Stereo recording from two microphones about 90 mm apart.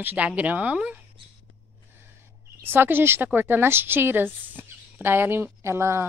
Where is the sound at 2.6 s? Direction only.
25° right (ahead or behind).